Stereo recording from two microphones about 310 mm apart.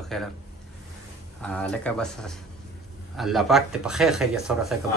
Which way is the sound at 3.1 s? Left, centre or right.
Centre.